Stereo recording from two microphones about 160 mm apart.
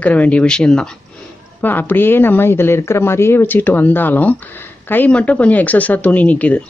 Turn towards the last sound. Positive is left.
turn(degrees=10)  # may be behind; listen again after turning